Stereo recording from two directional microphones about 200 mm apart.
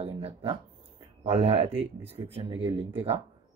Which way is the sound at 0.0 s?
30° right (ahead or behind).